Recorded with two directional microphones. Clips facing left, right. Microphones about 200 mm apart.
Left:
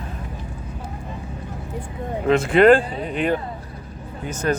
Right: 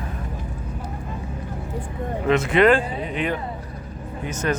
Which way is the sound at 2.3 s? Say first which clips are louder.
Left 3 dB; 30° left (ahead or behind).